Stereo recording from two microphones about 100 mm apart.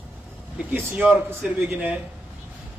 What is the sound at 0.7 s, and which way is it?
Speech, 20° right (ahead or behind).